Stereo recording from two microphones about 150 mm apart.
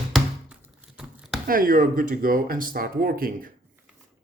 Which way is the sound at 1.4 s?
70° right (ahead or behind).